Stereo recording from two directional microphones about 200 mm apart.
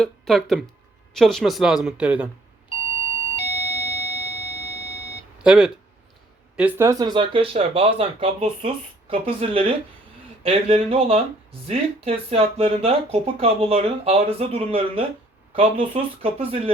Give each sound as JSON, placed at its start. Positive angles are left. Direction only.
{"t": 0.0, "sound": "speech", "side_deg": 0}
{"t": 2.6, "sound": "doorbell", "side_deg": 25}
{"t": 5.4, "sound": "speech", "side_deg": -5}